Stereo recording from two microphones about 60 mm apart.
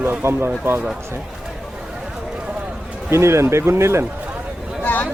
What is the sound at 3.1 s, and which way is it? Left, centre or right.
Speech, right.